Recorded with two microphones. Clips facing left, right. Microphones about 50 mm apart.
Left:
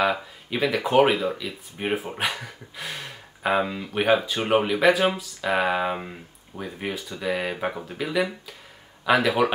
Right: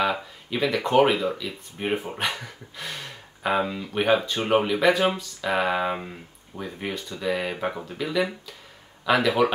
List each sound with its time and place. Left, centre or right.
0.0 s speech: centre